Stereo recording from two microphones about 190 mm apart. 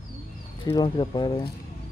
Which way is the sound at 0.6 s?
25° left (ahead or behind).